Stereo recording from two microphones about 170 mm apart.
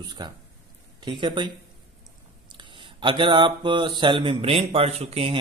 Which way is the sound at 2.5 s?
30° right (ahead or behind).